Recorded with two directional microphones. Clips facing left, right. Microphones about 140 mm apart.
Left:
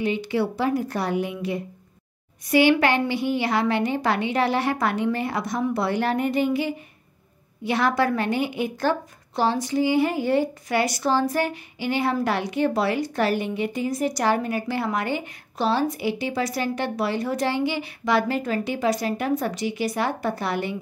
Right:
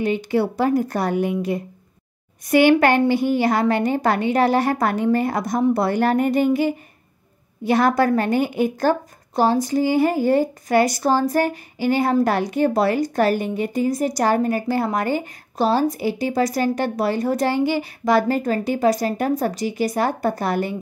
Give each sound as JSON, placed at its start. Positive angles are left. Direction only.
{"t": 0.0, "sound": "a woman's voice", "side_deg": -45}